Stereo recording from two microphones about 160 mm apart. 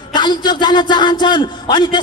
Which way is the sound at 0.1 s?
30° left (ahead or behind).